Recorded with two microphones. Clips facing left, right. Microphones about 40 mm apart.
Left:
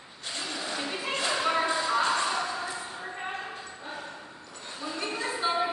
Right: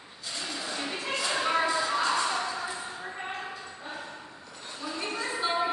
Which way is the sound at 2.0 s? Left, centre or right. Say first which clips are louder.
Even; left.